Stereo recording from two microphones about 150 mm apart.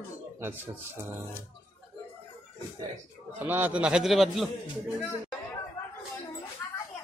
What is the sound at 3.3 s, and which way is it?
A man's voice, 15° right (ahead or behind).